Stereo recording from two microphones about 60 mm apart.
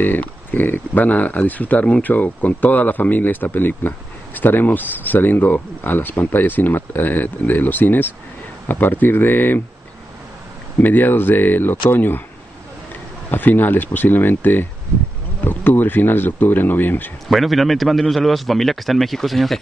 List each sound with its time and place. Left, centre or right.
0.0 s speech: left
10.8 s speech: left
13.3 s speech: left
17.3 s a man's voice: centre